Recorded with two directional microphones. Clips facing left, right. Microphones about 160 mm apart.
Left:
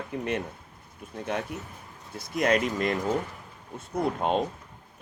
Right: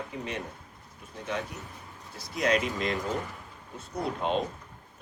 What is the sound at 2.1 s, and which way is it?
Speech, 50° left (ahead or behind).